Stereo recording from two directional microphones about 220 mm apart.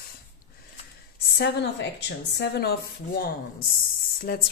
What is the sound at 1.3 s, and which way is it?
A woman's voice, 50° left (ahead or behind).